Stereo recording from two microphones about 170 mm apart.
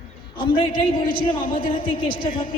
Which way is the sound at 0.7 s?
60° left (ahead or behind).